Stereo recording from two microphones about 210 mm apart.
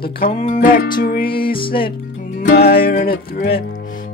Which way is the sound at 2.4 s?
45° left (ahead or behind).